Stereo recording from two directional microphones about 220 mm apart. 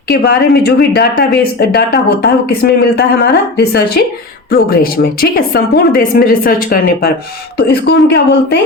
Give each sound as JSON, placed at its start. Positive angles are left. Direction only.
{"t": 0.1, "sound": "speech", "side_deg": 45}